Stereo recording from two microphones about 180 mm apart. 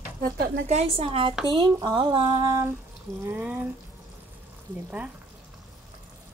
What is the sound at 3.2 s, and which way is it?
Speech, 10° right (ahead or behind).